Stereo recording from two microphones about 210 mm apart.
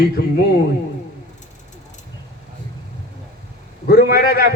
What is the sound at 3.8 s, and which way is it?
Speech, 45° left (ahead or behind).